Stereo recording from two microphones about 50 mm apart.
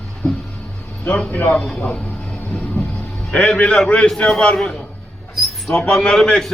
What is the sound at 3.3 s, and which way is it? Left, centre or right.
A man's voice, left.